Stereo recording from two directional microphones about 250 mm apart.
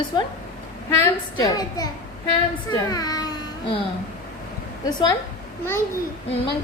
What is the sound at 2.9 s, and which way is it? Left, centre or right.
Speech, centre.